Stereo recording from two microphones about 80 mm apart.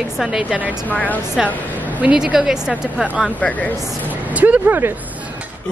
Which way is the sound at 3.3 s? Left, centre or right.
Centre.